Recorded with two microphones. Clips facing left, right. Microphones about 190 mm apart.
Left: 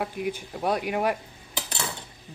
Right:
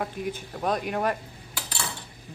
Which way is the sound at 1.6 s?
20° left (ahead or behind).